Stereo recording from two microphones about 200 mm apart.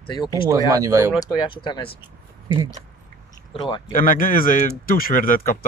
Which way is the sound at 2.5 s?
20° right (ahead or behind).